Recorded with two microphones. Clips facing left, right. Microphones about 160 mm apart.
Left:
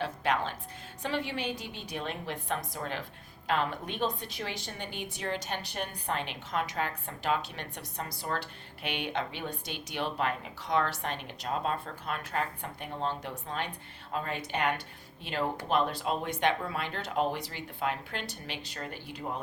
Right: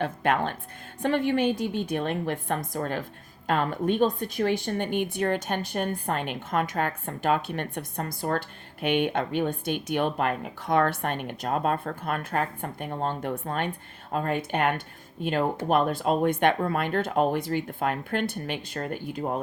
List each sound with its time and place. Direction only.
0.0 s a woman's voice: 55° right (ahead or behind)